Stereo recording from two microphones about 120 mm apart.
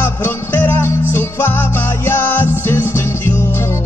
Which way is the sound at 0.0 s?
15° left (ahead or behind).